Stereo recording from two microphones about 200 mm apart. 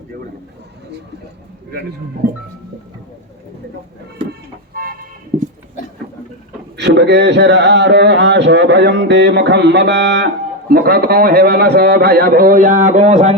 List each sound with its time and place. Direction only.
4.7 s vehicle: 45° right (ahead or behind)
6.7 s a man's voice: 60° right (ahead or behind); by 13.3 s 35° right (ahead or behind)